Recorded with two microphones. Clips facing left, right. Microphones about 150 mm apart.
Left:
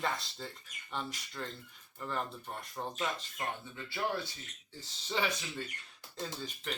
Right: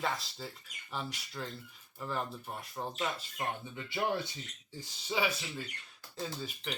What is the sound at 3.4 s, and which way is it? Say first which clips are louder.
Speech: right 3 dB; 15° right (ahead or behind).